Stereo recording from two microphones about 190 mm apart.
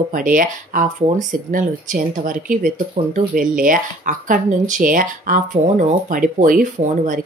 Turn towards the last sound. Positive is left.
turn(degrees=-40)  # may be behind; listen again after turning